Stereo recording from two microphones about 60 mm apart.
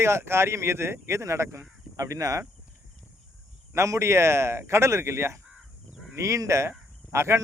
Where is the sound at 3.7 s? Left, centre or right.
Right.